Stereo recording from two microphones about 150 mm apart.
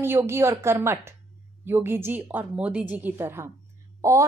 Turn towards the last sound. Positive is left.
turn(degrees=-20)  # may be behind; listen again after turning